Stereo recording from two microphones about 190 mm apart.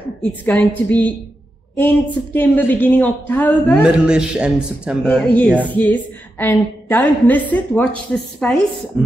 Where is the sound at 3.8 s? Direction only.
5° right (ahead or behind).